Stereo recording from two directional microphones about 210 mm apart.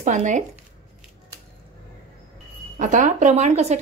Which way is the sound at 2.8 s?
35° right (ahead or behind).